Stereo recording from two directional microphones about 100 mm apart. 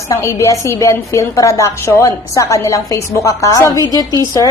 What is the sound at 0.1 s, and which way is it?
A woman's voice, 30° left (ahead or behind).